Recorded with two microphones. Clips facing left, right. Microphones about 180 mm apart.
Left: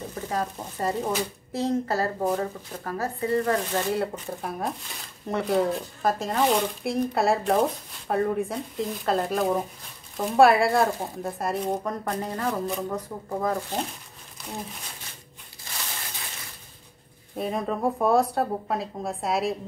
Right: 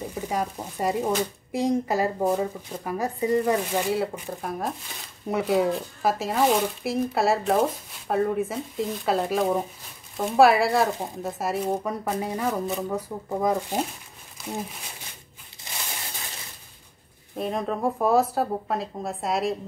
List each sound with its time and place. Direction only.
0.1 s speech: 10° right (ahead or behind)
15.7 s a sound: 20° right (ahead or behind)
17.4 s speech: centre (ahead or behind)